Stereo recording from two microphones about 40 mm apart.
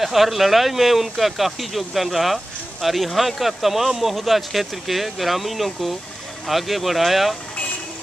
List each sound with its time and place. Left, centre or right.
0.0 s speech: centre